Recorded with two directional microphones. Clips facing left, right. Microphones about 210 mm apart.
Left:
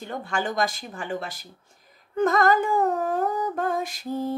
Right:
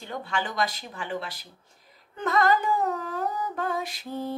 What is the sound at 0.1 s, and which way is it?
Speech, 45° left (ahead or behind).